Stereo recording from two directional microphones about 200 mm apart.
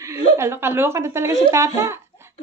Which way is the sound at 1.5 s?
15° right (ahead or behind).